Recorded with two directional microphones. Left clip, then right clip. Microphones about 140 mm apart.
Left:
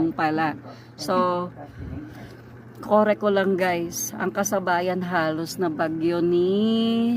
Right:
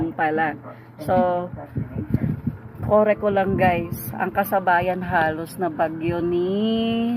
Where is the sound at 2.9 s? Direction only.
40° left (ahead or behind).